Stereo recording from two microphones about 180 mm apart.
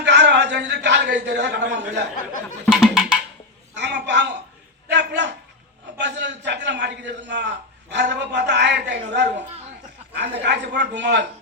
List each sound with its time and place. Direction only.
0.0 s a sound: 75° right (ahead or behind)
2.6 s speech: centre (ahead or behind)
3.8 s a man's voice: 75° right (ahead or behind)